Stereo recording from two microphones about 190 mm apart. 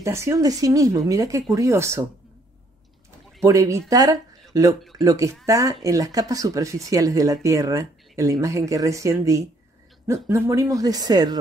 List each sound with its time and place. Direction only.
0.0 s speech: 15° right (ahead or behind)
3.4 s a woman's voice: 15° right (ahead or behind)